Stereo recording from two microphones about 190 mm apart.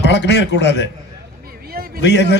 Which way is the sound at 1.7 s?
50° right (ahead or behind).